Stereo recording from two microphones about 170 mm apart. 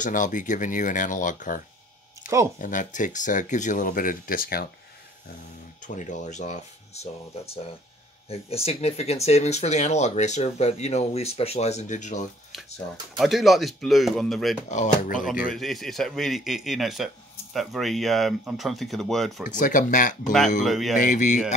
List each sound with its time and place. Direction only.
0.0 s speech: 50° left (ahead or behind)
2.6 s speech: 50° left (ahead or behind)
5.9 s speech: 45° left (ahead or behind)
13.2 s speech: centre (ahead or behind)
14.7 s speech: 50° left (ahead or behind)
15.5 s speech: centre (ahead or behind)
19.5 s speech: 50° left (ahead or behind)
20.6 s speech: centre (ahead or behind)
21.0 s speech: 50° left (ahead or behind)